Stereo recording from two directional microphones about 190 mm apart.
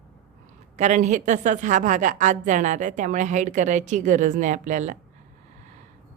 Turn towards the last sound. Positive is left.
turn(degrees=-40)  # may be behind; listen again after turning